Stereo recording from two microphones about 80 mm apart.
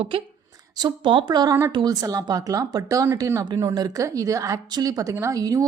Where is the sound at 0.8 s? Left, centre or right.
Right.